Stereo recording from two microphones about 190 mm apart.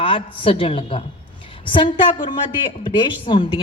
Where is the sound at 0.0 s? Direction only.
30° left (ahead or behind).